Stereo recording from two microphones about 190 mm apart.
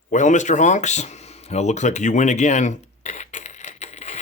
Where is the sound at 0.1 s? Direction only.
40° left (ahead or behind).